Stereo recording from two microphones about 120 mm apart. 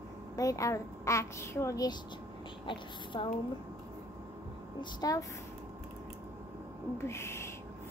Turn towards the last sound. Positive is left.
turn(degrees=20)  # may be behind; listen again after turning